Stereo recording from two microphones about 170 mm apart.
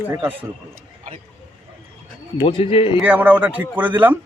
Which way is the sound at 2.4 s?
35° left (ahead or behind).